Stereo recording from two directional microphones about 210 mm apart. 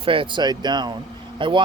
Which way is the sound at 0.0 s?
25° right (ahead or behind).